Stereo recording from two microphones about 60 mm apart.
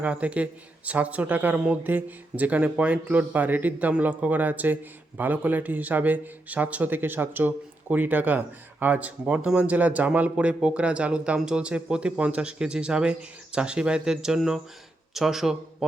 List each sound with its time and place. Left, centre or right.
0.0 s a man's voice: right
1.5 s a man's voice: centre
1.8 s a man's voice: right; by 15.5 s centre